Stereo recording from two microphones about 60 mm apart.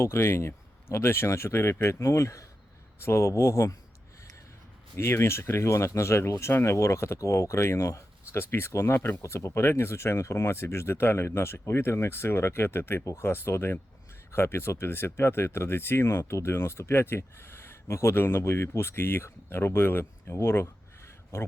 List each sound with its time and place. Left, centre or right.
0.0 s speech: left
4.9 s speech: left
8.3 s speech: left